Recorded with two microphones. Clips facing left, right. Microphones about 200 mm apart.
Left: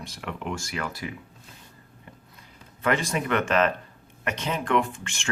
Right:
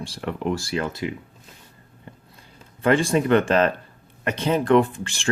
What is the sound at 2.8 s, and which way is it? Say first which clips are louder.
Speech: right 7 dB; 30° right (ahead or behind).